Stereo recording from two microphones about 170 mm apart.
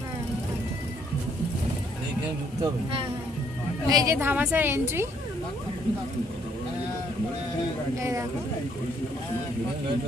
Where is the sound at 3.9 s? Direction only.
15° right (ahead or behind).